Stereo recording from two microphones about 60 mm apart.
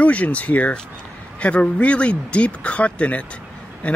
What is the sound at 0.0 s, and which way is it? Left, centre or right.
Speech, left.